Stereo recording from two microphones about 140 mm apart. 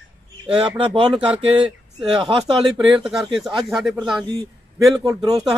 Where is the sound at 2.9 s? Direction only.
5° right (ahead or behind).